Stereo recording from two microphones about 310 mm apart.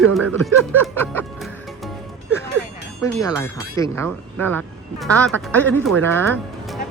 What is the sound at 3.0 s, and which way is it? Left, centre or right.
Speech, centre.